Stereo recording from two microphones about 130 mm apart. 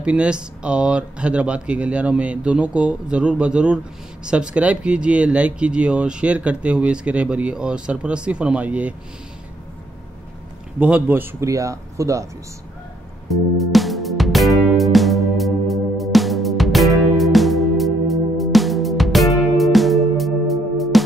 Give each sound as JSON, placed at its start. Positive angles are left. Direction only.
{"t": 0.0, "sound": "speech", "side_deg": -10}
{"t": 10.8, "sound": "speech", "side_deg": -10}
{"t": 13.3, "sound": "music", "side_deg": 0}